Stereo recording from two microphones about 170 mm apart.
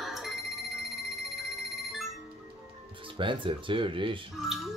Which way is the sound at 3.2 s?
30° right (ahead or behind).